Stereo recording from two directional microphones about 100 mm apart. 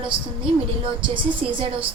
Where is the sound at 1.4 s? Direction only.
70° right (ahead or behind).